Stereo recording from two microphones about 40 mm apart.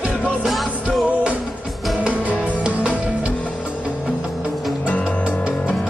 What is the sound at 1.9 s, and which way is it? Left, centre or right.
Music, right.